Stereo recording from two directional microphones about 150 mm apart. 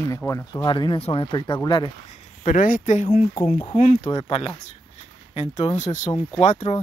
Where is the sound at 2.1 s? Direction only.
60° left (ahead or behind).